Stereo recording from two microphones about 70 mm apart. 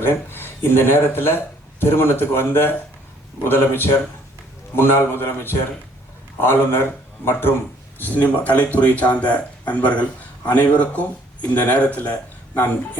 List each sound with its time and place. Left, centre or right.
0.0 s a man's voice: left